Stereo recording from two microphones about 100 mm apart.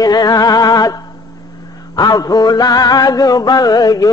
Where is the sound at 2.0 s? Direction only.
40° left (ahead or behind).